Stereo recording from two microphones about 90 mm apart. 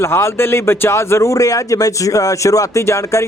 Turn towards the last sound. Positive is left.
turn(degrees=35)  # may be behind; listen again after turning